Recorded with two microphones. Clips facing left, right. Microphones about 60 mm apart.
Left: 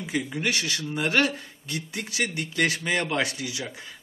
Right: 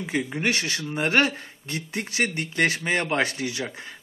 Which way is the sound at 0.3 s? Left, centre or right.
Right.